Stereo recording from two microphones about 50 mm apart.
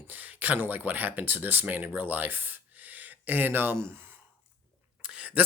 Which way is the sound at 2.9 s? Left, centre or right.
Right.